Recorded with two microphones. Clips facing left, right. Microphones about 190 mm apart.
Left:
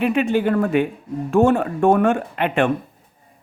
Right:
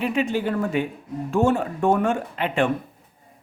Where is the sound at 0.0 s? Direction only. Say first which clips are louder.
Left 5 dB; 60° left (ahead or behind).